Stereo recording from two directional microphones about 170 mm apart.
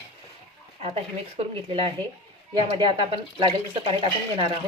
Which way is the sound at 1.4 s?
35° right (ahead or behind).